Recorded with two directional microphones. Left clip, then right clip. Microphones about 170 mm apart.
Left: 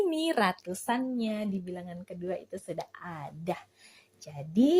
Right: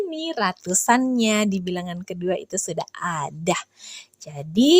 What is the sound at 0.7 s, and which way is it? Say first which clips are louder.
A woman's voice: right 12 dB; 40° right (ahead or behind).